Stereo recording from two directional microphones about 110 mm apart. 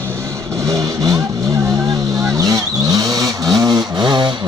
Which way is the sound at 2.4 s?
35° right (ahead or behind).